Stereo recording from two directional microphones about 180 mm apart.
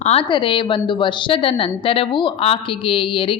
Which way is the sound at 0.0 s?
35° left (ahead or behind).